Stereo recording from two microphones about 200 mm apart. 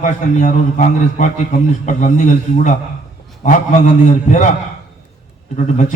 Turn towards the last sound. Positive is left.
turn(degrees=40)  # may be behind; listen again after turning